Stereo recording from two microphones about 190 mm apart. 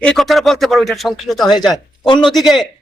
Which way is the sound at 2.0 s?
25° left (ahead or behind).